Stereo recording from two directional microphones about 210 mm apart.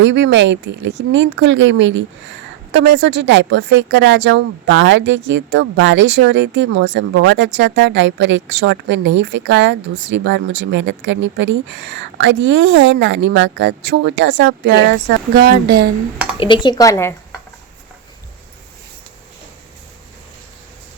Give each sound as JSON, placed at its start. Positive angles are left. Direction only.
{"t": 0.0, "sound": "speech", "side_deg": -60}
{"t": 16.4, "sound": "a woman's voice", "side_deg": 20}